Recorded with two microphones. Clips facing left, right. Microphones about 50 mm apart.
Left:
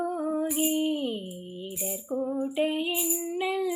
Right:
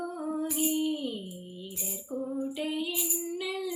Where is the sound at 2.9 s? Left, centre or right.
Centre.